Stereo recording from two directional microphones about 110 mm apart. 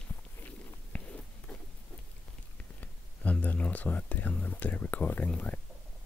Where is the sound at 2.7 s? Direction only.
15° left (ahead or behind).